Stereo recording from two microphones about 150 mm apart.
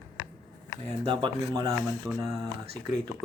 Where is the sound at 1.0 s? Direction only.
30° right (ahead or behind).